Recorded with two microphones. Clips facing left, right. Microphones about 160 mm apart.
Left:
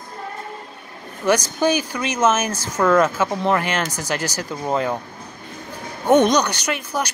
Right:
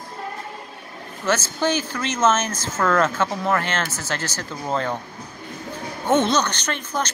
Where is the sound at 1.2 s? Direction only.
15° left (ahead or behind).